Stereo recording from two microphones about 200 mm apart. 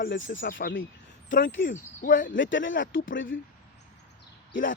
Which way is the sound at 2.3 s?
70° left (ahead or behind).